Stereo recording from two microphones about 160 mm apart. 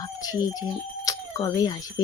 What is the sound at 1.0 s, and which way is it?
Speech, 25° left (ahead or behind).